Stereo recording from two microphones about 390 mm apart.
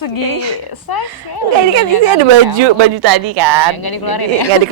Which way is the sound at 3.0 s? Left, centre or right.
Right.